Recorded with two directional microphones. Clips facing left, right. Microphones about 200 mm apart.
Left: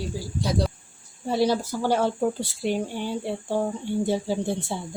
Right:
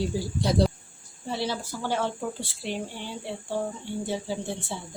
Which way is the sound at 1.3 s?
40° left (ahead or behind).